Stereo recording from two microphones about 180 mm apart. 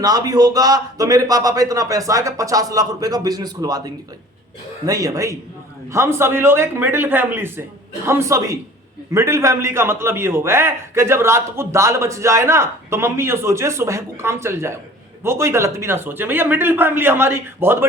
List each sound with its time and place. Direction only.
0.0 s a man's voice: 20° right (ahead or behind)